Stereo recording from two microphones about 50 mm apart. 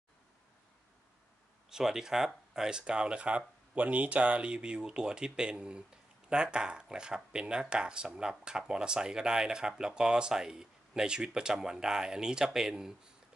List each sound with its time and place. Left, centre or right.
1.7 s speech: centre